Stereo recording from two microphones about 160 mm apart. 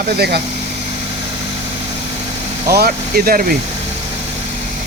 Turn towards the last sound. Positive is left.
turn(degrees=-65)  # may be behind; listen again after turning